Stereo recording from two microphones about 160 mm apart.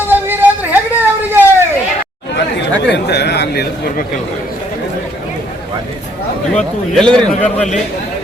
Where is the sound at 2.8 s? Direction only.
90° left.